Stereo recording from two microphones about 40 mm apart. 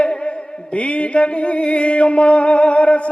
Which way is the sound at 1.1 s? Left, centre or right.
Left.